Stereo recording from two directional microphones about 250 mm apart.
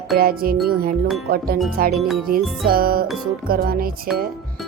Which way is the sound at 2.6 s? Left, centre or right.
Right.